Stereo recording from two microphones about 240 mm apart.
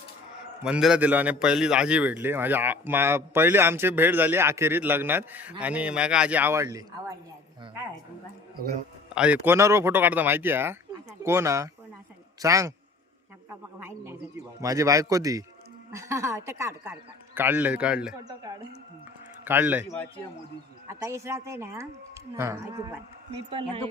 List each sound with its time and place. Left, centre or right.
0.6 s a man's voice: centre
9.1 s a man's voice: centre
13.7 s a man's voice: centre
18.3 s a man's voice: centre
19.9 s speech: centre
20.8 s a man's voice: centre
23.5 s a man's voice: right